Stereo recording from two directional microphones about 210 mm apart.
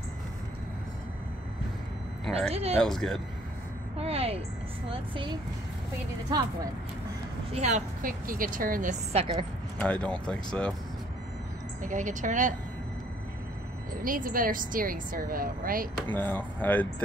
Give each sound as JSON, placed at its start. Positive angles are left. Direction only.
{"t": 2.5, "sound": "a woman's voice", "side_deg": -30}
{"t": 2.8, "sound": "speech", "side_deg": 0}
{"t": 4.0, "sound": "a woman's voice", "side_deg": -30}
{"t": 7.5, "sound": "a woman's voice", "side_deg": -35}
{"t": 9.8, "sound": "speech", "side_deg": 5}
{"t": 11.8, "sound": "a woman's voice", "side_deg": -35}
{"t": 14.0, "sound": "a woman's voice", "side_deg": -40}
{"t": 16.1, "sound": "speech", "side_deg": 10}